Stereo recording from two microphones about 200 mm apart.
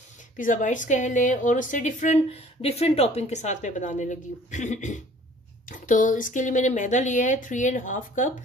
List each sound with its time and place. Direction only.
0.4 s a woman's voice: 40° left (ahead or behind)